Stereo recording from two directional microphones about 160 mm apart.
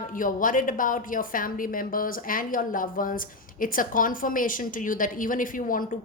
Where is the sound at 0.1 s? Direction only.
55° left (ahead or behind).